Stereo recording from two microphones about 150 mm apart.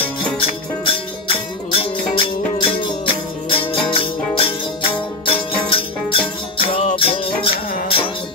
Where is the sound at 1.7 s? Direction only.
40° left (ahead or behind).